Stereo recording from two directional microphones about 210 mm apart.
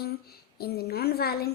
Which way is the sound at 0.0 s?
50° left (ahead or behind).